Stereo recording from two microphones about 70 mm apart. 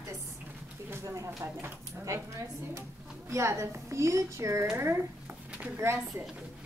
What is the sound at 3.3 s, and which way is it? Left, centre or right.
A woman's voice, right.